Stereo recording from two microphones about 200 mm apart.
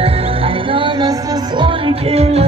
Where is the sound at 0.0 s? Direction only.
25° right (ahead or behind).